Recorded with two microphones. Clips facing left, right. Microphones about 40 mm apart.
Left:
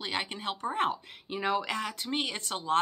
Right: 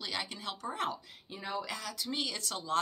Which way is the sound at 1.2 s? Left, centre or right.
Left.